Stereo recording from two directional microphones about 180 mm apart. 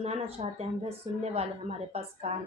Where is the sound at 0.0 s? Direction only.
35° right (ahead or behind).